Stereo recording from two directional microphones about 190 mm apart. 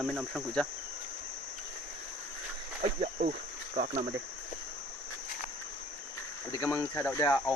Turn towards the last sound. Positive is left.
turn(degrees=15)  # may be behind; listen again after turning